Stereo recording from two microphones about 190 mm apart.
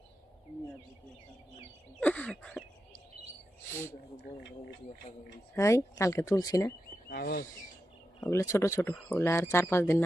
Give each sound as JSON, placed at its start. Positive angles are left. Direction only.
{"t": 2.0, "sound": "a sound", "side_deg": 5}
{"t": 3.7, "sound": "speech", "side_deg": 15}
{"t": 5.5, "sound": "speech", "side_deg": 15}
{"t": 7.1, "sound": "speech", "side_deg": 55}
{"t": 8.2, "sound": "speech", "side_deg": 15}